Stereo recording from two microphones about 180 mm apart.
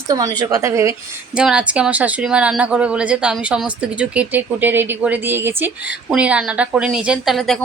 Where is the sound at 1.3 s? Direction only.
5° right (ahead or behind).